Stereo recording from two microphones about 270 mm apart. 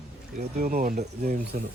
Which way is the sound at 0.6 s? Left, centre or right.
Right.